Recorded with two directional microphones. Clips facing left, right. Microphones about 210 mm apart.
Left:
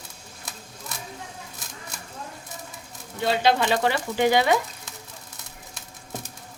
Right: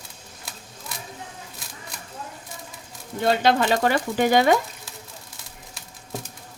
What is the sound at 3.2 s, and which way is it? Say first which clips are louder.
A woman's voice: right 2 dB; 45° right (ahead or behind).